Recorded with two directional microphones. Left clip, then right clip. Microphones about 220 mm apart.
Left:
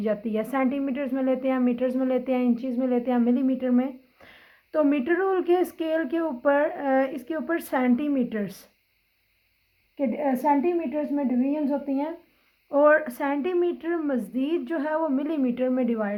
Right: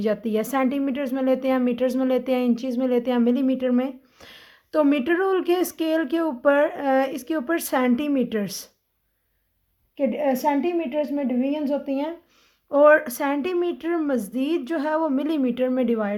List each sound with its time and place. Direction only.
0.0 s a woman's voice: 45° right (ahead or behind)
10.0 s a woman's voice: 45° right (ahead or behind)